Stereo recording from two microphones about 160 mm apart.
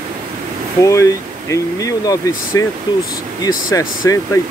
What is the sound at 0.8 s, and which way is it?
Speech, 20° left (ahead or behind).